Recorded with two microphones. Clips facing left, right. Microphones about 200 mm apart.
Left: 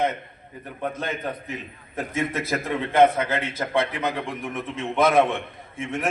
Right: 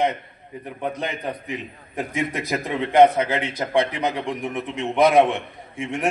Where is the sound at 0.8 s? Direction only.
15° right (ahead or behind).